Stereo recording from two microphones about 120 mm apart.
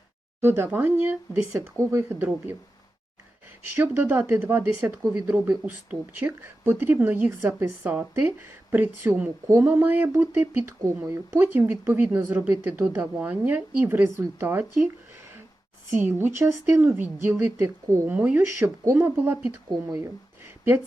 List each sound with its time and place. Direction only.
0.4 s speech: 20° right (ahead or behind)
3.8 s speech: 15° right (ahead or behind)
16.0 s speech: 20° right (ahead or behind)